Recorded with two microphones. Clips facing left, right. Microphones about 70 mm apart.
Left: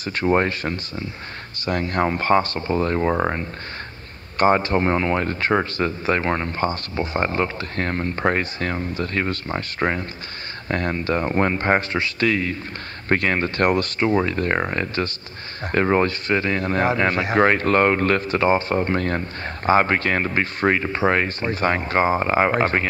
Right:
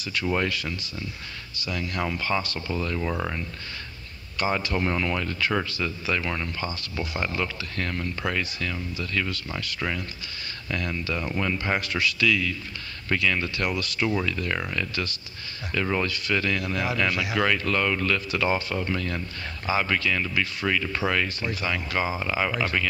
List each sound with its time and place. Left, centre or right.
0.0 s speech: left